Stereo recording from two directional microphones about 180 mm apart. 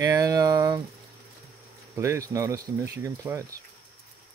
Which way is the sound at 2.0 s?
15° right (ahead or behind).